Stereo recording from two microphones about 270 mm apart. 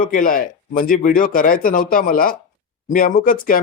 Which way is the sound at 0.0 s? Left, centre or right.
Left.